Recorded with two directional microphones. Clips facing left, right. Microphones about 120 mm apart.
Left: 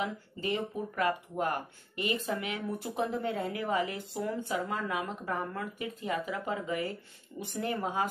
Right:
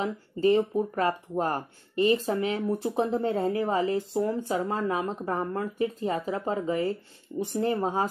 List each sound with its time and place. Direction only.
0.0 s speech: 35° right (ahead or behind)